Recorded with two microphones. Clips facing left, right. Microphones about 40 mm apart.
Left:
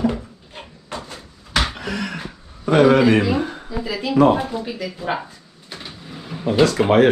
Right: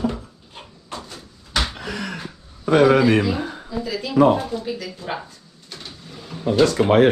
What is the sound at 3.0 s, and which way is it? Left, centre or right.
A woman's voice, centre.